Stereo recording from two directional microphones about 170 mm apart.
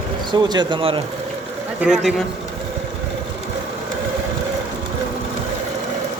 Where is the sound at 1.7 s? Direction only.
5° right (ahead or behind).